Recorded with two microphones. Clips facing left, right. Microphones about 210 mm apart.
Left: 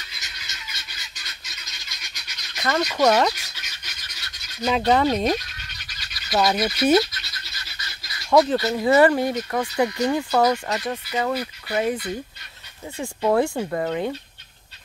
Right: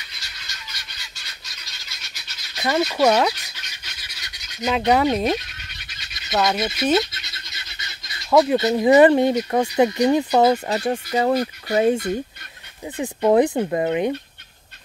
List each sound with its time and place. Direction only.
0.2 s fowl: 20° left (ahead or behind)
2.6 s speech: 10° right (ahead or behind)
4.0 s goose: 15° right (ahead or behind)
4.6 s speech: 5° right (ahead or behind)
5.9 s goat: 25° right (ahead or behind)
6.3 s speech: 5° left (ahead or behind)
8.3 s speech: 5° right (ahead or behind)
8.5 s speech: 20° right (ahead or behind)
11.1 s speech: 40° right (ahead or behind)
12.9 s speech: 15° right (ahead or behind)